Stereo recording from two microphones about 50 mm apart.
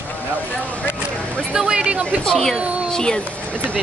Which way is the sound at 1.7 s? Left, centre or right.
Centre.